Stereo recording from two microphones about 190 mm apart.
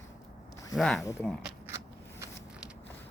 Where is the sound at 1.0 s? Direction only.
15° left (ahead or behind).